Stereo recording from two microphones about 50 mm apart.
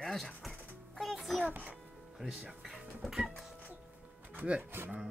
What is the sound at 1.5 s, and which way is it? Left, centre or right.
Speech, right.